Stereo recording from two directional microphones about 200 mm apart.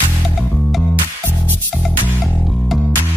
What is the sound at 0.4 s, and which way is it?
Music, centre (ahead or behind).